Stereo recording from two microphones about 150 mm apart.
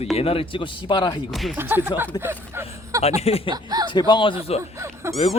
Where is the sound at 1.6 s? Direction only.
15° right (ahead or behind).